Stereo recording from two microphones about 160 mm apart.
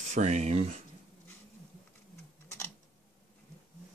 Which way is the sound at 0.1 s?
45° right (ahead or behind).